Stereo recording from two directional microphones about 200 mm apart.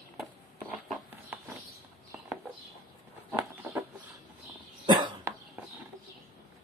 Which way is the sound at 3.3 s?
10° right (ahead or behind).